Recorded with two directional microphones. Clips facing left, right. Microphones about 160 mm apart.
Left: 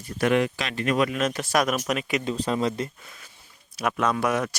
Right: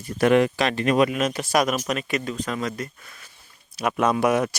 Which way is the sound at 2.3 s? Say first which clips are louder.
Left 3 dB; 30° left (ahead or behind).